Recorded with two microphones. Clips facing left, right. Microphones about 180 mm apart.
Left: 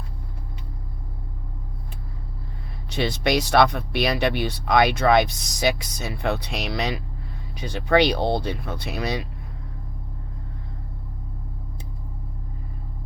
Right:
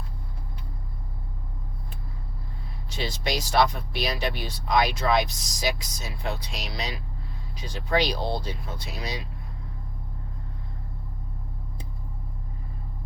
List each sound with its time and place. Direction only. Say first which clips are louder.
2.9 s speech: left 7 dB; 65° left (ahead or behind)